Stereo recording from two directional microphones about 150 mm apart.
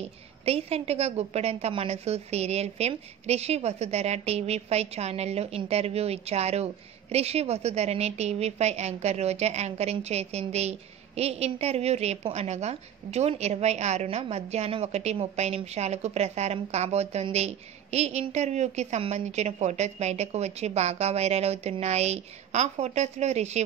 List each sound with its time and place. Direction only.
0.5 s a woman's voice: 45° right (ahead or behind)